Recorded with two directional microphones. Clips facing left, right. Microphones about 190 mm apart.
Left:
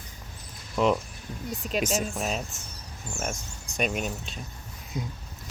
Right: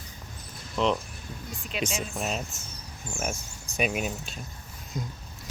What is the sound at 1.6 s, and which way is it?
Speech, 40° left (ahead or behind).